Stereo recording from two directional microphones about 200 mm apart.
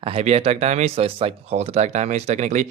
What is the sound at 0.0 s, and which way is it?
Speech, 30° right (ahead or behind).